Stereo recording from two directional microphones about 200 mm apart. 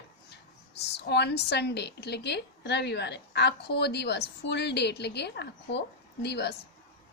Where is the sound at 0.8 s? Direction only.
55° left (ahead or behind).